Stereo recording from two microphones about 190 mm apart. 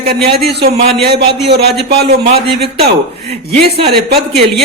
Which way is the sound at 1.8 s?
55° right (ahead or behind).